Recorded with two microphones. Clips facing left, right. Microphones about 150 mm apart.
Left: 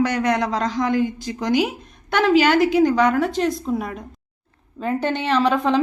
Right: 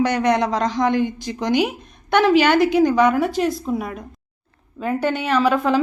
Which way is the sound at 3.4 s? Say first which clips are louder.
Even; 5° right (ahead or behind).